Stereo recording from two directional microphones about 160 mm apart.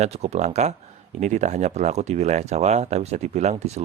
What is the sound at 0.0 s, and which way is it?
Speech, 45° right (ahead or behind).